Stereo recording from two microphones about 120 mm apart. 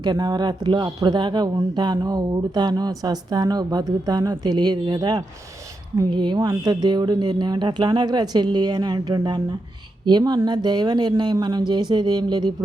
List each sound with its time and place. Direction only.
0.0 s speech: 35° right (ahead or behind)